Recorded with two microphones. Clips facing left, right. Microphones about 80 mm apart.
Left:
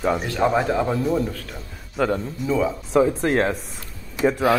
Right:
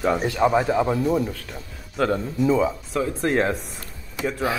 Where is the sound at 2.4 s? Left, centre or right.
Centre.